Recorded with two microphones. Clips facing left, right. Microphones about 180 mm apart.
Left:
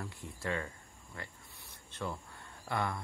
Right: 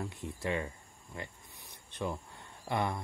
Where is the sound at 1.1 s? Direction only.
15° right (ahead or behind).